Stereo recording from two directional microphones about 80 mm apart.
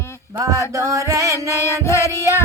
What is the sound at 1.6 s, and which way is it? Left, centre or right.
Music, left.